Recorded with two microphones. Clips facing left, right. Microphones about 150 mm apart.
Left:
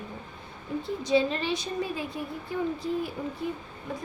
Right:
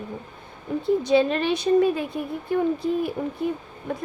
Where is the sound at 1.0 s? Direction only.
60° right (ahead or behind).